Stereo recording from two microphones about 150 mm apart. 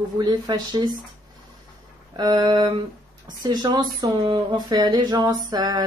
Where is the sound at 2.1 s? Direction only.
30° right (ahead or behind).